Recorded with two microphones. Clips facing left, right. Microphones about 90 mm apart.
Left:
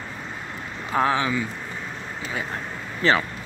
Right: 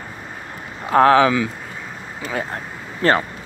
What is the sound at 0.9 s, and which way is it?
Speech, 65° right (ahead or behind).